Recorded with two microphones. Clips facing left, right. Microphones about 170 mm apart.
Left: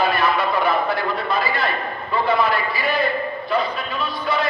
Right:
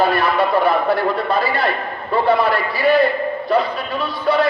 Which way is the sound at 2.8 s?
35° right (ahead or behind).